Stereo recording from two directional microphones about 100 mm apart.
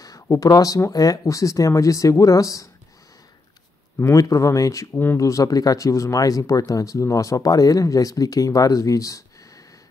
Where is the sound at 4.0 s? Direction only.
35° left (ahead or behind).